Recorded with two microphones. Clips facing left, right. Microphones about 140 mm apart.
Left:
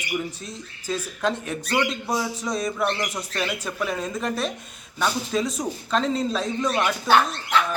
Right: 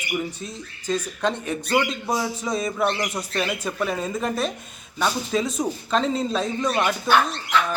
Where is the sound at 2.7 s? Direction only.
20° right (ahead or behind).